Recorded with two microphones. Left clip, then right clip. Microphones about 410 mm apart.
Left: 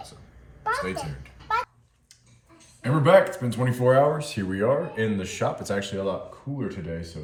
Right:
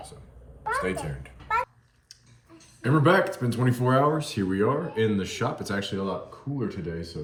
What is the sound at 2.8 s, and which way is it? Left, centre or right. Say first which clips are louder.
Speech: left 3 dB; centre.